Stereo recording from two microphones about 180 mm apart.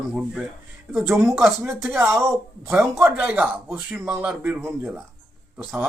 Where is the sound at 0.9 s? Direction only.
10° right (ahead or behind).